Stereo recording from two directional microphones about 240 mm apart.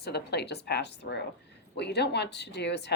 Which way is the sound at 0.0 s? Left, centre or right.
Left.